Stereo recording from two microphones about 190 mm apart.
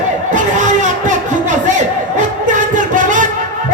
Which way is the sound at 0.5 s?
40° right (ahead or behind).